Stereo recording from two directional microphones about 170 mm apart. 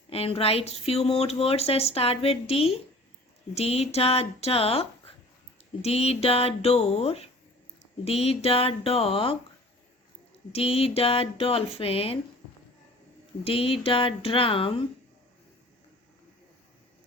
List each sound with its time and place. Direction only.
0.1 s speech: 35° left (ahead or behind)
10.5 s speech: 35° left (ahead or behind)
13.4 s speech: 35° left (ahead or behind)